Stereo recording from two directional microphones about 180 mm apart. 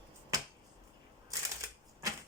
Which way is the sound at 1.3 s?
20° right (ahead or behind).